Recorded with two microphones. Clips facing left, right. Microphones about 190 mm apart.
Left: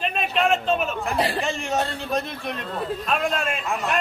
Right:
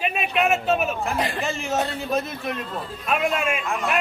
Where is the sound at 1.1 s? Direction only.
35° left (ahead or behind).